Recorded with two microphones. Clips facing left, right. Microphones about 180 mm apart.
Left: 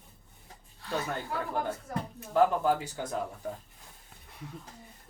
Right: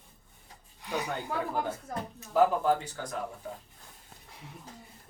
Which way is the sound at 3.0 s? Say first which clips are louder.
Left 2 dB; 15° left (ahead or behind).